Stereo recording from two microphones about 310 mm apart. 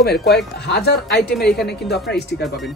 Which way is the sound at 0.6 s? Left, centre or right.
Left.